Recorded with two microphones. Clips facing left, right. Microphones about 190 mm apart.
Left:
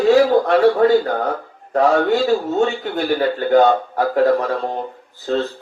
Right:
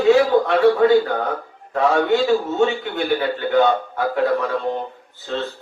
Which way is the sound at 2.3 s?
40° left (ahead or behind).